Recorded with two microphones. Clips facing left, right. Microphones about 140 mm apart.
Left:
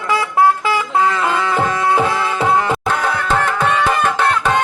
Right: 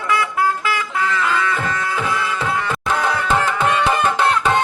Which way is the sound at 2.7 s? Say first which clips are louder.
Left 2 dB; centre (ahead or behind).